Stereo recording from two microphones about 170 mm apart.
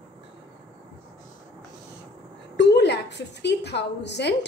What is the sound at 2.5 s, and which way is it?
A woman's voice, 85° left.